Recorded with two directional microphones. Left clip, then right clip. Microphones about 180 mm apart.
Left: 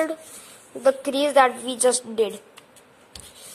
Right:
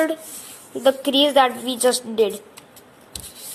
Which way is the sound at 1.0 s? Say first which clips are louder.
Right 2 dB; 20° left (ahead or behind).